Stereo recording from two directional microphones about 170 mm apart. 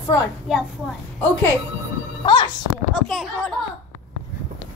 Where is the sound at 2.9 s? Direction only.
Centre (ahead or behind).